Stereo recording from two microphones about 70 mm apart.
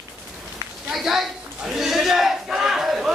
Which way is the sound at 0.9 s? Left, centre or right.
Centre.